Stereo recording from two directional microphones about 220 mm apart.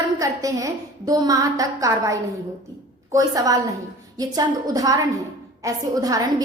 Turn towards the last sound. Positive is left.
turn(degrees=-15)  # may be behind; listen again after turning